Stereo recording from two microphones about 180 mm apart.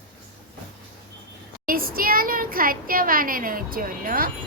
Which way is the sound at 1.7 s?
55° right (ahead or behind).